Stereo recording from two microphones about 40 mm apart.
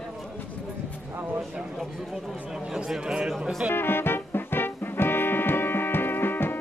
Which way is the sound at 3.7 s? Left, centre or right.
Left.